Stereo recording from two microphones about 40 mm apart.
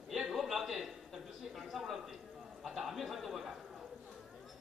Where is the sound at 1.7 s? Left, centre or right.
Centre.